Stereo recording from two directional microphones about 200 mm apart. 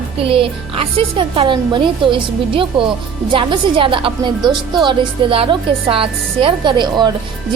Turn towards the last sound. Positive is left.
turn(degrees=-20)  # may be behind; listen again after turning